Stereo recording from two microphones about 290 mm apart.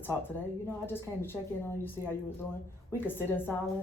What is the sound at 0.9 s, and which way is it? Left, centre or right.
A woman's voice, centre.